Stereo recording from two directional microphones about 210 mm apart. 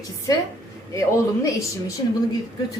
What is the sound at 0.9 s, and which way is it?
Speech, 15° left (ahead or behind).